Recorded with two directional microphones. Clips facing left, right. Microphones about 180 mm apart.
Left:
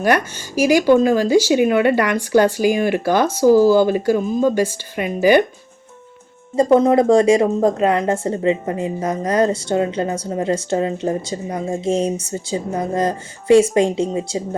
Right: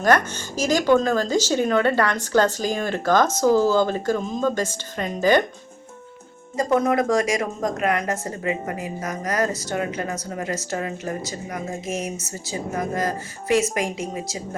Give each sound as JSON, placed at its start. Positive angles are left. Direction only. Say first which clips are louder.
{"t": 0.0, "sound": "speech", "louder": "left 2 dB", "side_deg": 10}
{"t": 6.6, "sound": "speech", "louder": "left 7 dB", "side_deg": 30}